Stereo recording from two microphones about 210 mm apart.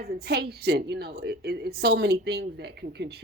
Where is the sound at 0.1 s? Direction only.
50° right (ahead or behind).